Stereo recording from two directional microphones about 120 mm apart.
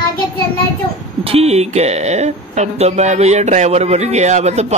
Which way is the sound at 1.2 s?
55° right (ahead or behind).